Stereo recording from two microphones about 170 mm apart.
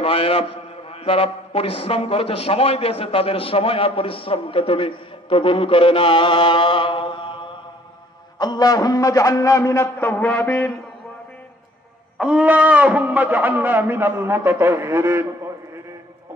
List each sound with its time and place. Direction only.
0.0 s a man's voice: 35° left (ahead or behind); by 10.7 s 10° left (ahead or behind)
12.2 s speech: 5° right (ahead or behind)